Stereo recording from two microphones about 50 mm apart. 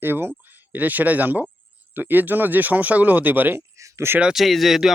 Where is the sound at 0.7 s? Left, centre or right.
Right.